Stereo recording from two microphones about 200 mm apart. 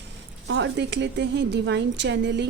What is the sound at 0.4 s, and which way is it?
A woman's voice, 60° right (ahead or behind).